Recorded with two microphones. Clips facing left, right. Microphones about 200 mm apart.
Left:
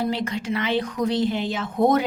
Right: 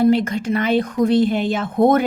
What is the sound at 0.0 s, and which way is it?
Speech, 50° right (ahead or behind).